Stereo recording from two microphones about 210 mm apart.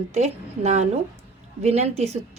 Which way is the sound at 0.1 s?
30° right (ahead or behind).